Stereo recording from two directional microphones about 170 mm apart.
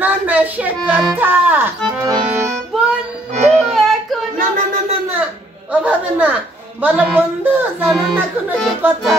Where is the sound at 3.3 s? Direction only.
40° right (ahead or behind).